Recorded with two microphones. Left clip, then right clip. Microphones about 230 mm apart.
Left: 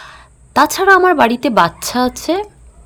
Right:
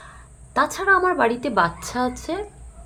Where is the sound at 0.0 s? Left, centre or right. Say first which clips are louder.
Left 8 dB; left.